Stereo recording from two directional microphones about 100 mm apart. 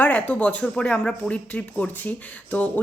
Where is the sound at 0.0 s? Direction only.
15° left (ahead or behind).